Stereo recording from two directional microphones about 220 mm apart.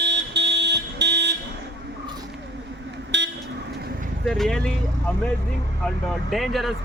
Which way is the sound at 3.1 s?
50° right (ahead or behind).